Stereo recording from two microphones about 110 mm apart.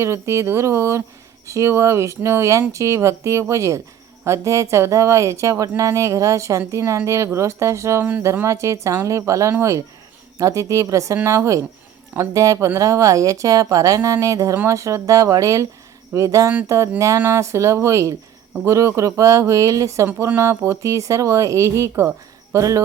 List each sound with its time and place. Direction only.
0.0 s speech: 25° right (ahead or behind)